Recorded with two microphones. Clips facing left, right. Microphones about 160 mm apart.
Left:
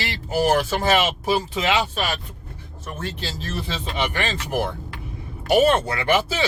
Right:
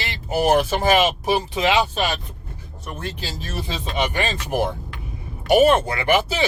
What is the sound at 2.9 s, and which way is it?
Speech, 15° right (ahead or behind).